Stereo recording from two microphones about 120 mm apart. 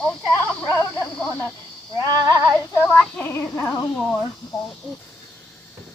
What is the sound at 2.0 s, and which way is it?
Female singing, 30° right (ahead or behind).